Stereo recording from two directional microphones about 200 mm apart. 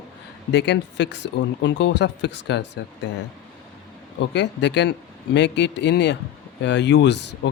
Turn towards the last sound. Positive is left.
turn(degrees=60)  # may be behind; listen again after turning